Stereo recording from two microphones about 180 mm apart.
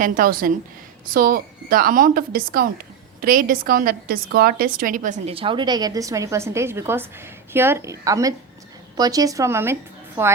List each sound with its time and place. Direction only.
0.0 s a woman's voice: 50° right (ahead or behind); by 9.7 s 15° right (ahead or behind)